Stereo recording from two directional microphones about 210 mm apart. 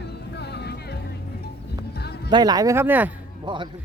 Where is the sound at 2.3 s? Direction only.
20° right (ahead or behind).